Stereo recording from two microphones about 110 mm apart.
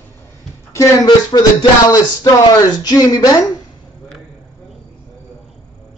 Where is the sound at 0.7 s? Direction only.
30° left (ahead or behind).